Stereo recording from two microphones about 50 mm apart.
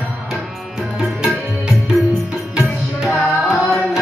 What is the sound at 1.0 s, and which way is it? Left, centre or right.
Music, centre.